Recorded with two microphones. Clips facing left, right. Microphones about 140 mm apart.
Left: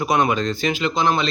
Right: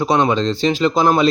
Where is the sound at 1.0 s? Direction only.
45° right (ahead or behind).